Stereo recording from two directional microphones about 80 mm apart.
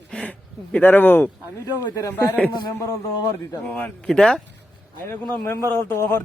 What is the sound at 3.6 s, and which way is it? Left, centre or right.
Speech, centre.